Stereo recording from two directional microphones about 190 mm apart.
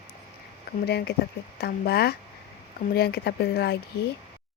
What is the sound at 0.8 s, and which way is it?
Speech, 60° left (ahead or behind).